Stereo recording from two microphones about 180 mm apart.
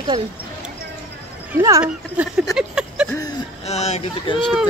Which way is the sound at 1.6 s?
20° right (ahead or behind).